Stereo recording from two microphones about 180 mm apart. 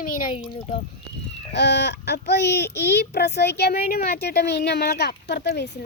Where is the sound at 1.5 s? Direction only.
70° left (ahead or behind).